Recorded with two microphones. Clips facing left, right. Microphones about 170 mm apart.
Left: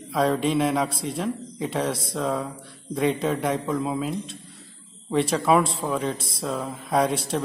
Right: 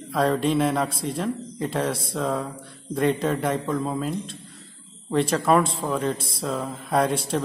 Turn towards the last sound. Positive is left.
turn(degrees=0)  # may be behind; listen again after turning